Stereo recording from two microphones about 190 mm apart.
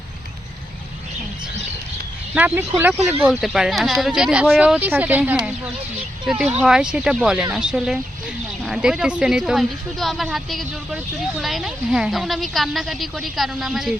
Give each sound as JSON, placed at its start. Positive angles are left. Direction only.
{"t": 2.3, "sound": "a woman's voice", "side_deg": -10}